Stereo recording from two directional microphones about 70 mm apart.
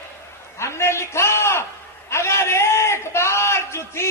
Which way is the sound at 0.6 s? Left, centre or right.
Left.